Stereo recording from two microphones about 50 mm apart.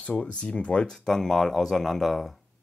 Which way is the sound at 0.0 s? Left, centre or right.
Left.